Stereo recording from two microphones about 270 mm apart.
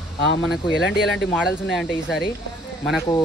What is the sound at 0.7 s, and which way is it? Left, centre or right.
Speech, left.